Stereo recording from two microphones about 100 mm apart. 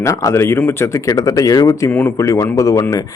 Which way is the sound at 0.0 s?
30° left (ahead or behind).